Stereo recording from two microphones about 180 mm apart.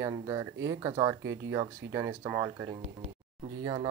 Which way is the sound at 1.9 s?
10° right (ahead or behind).